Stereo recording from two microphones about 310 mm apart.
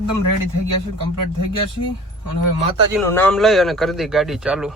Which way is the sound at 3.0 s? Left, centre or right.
Centre.